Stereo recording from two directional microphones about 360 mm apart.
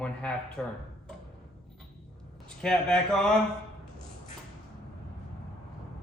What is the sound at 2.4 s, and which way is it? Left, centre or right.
Speech, centre.